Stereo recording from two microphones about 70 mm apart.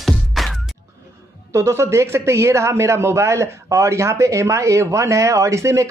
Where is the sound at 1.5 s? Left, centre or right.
Right.